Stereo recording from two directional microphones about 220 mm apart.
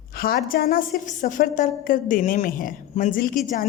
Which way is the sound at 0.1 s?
40° left (ahead or behind).